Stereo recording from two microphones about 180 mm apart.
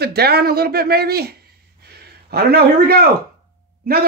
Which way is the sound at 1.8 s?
65° right (ahead or behind).